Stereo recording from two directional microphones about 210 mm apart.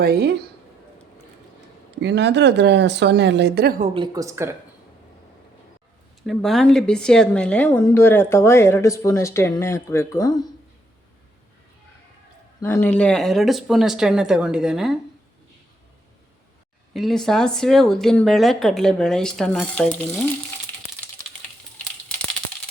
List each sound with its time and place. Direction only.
0.0 s a woman's voice: 50° right (ahead or behind)
2.0 s speech: 55° right (ahead or behind)
3.8 s speech: 25° right (ahead or behind)
6.2 s speech: centre (ahead or behind); by 10.4 s 15° left (ahead or behind)
12.5 s speech: 10° left (ahead or behind)
16.9 s speech: centre (ahead or behind)